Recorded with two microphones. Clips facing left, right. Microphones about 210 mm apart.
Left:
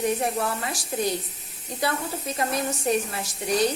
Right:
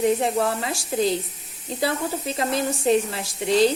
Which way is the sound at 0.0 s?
25° right (ahead or behind).